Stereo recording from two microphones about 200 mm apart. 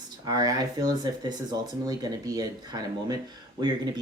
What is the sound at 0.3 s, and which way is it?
Speech, 20° right (ahead or behind).